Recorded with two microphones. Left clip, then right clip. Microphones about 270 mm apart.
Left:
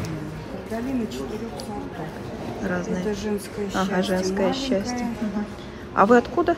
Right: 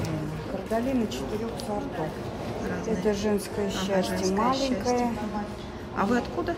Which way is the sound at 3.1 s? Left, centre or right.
Right.